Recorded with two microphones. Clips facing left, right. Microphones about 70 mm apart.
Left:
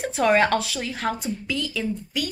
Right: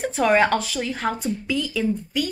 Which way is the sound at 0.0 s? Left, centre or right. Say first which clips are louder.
Right 1 dB; centre.